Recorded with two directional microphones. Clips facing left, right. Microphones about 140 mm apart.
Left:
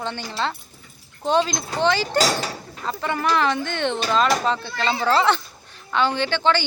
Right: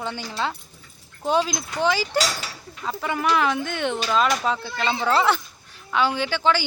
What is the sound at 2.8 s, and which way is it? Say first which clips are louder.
A man's voice: left 1 dB; 5° right (ahead or behind).